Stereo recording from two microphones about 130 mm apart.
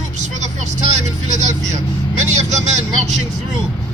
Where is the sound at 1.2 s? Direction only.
65° right (ahead or behind).